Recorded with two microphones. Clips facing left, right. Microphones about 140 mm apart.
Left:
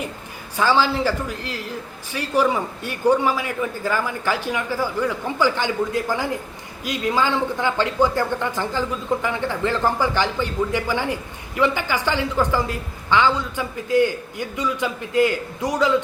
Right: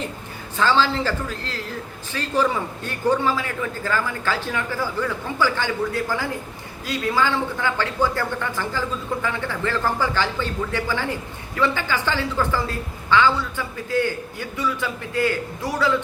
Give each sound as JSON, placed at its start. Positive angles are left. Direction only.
{"t": 0.5, "sound": "speech", "side_deg": 10}